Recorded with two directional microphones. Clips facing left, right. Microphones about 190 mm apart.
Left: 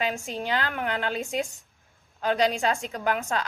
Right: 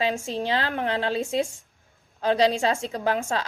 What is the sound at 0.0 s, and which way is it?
A woman's voice, 30° right (ahead or behind).